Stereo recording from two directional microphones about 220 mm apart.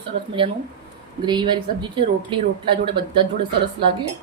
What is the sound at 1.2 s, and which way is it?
Speech, 20° right (ahead or behind).